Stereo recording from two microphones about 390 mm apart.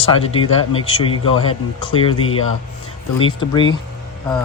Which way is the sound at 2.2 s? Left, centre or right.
Left.